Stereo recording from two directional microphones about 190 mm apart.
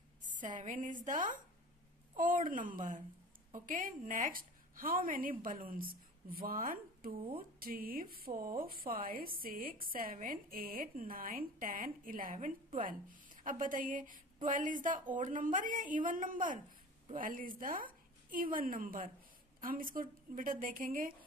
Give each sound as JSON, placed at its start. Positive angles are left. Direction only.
{"t": 0.2, "sound": "a woman's voice", "side_deg": -40}